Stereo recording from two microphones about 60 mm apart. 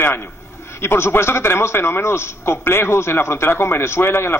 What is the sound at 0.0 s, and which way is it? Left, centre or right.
A man's voice, left.